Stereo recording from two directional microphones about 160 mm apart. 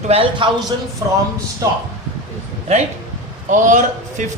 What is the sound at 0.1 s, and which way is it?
Speech, 35° right (ahead or behind).